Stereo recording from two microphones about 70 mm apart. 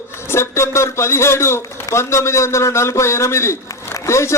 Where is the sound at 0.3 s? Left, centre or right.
Left.